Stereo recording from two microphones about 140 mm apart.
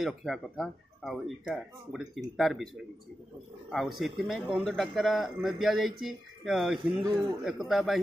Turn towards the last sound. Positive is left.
turn(degrees=0)  # may be behind; listen again after turning